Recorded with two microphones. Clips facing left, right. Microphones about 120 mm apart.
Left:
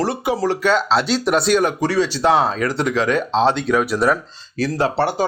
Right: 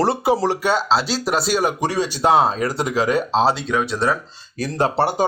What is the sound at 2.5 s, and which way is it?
Speech, 35° right (ahead or behind).